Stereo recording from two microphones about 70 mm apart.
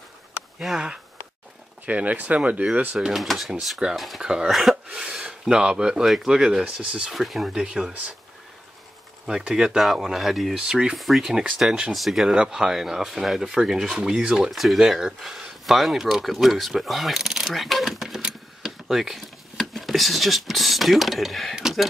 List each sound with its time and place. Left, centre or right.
0.6 s speech: centre
1.9 s speech: right
3.0 s speech: centre
4.2 s speech: centre
7.2 s speech: centre
9.2 s speech: centre
21.5 s a sound: centre